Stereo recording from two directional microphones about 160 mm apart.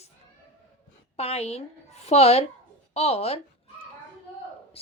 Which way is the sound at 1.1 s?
40° left (ahead or behind).